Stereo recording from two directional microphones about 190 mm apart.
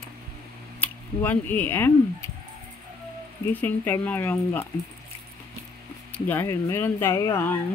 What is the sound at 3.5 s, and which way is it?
Speech, 10° left (ahead or behind).